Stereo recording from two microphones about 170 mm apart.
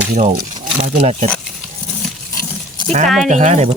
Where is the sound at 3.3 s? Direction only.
45° right (ahead or behind).